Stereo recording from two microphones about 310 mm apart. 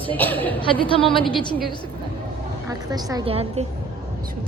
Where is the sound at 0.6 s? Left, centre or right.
Centre.